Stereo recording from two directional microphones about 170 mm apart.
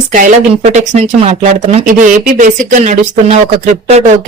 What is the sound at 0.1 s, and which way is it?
Speech, 50° right (ahead or behind).